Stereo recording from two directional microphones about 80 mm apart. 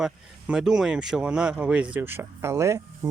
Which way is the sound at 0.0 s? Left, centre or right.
Centre.